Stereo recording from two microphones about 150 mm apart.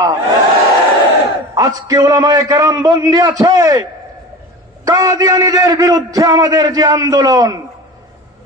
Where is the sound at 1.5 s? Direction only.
25° right (ahead or behind).